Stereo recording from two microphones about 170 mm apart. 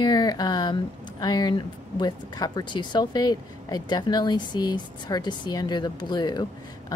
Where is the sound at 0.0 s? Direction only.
25° left (ahead or behind).